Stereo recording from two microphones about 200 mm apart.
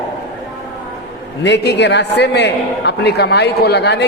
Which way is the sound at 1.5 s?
60° left (ahead or behind).